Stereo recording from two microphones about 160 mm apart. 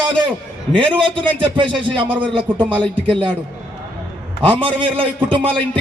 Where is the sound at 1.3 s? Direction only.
30° right (ahead or behind).